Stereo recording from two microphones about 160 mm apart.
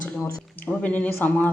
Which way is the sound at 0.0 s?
10° left (ahead or behind).